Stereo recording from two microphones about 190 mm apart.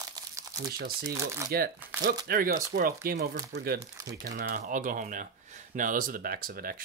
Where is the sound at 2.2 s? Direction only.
50° right (ahead or behind).